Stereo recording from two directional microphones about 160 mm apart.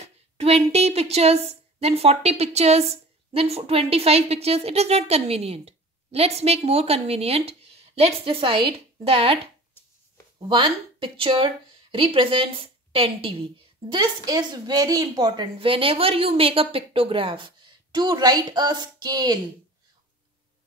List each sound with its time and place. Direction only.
0.0 s a woman's voice: 40° right (ahead or behind)
10.5 s a woman's voice: 30° right (ahead or behind)